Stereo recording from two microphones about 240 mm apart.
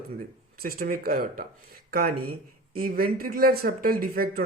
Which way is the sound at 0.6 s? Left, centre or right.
Right.